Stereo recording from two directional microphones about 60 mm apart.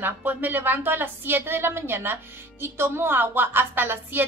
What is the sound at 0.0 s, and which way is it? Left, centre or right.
A woman's voice, right.